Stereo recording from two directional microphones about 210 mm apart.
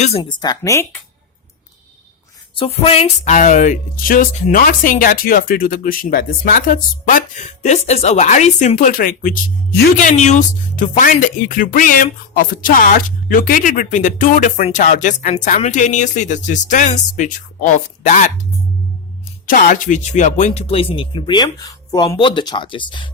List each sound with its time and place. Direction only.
0.0 s a woman's voice: 25° left (ahead or behind)
2.6 s speech: 25° left (ahead or behind)
19.5 s speech: 40° left (ahead or behind); by 23.0 s 20° left (ahead or behind)